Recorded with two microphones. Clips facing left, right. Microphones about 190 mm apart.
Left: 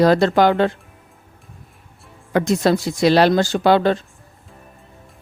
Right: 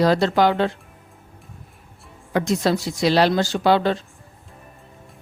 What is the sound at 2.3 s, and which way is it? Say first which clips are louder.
A woman's voice: left 3 dB; 55° left (ahead or behind).